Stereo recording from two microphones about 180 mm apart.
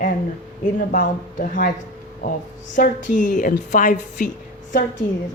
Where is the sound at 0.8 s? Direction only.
50° left (ahead or behind).